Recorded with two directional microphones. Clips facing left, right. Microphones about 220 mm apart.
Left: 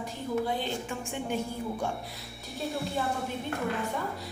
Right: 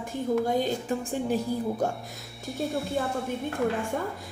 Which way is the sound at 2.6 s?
Centre (ahead or behind).